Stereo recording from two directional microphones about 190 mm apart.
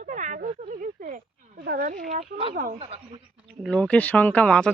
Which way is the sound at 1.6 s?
55° right (ahead or behind).